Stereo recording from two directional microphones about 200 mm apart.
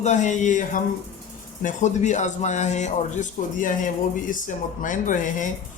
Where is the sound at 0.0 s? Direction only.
35° left (ahead or behind).